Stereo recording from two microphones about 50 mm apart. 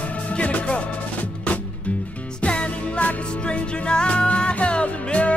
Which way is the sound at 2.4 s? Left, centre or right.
Left.